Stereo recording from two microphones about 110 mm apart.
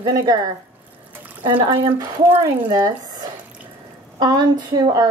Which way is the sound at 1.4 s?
50° right (ahead or behind).